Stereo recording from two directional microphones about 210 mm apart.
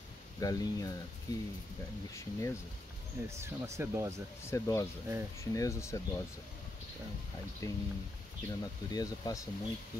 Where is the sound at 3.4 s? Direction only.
10° right (ahead or behind).